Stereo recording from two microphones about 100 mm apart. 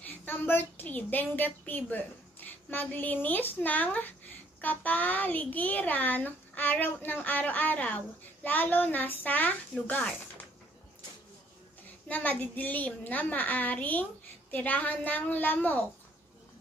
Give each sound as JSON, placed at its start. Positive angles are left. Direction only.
{"t": 0.0, "sound": "a child's voice", "side_deg": 20}
{"t": 12.1, "sound": "a child's voice", "side_deg": 15}